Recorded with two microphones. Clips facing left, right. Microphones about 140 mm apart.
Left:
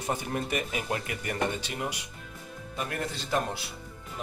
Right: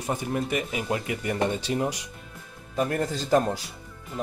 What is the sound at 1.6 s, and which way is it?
Speech, 35° right (ahead or behind).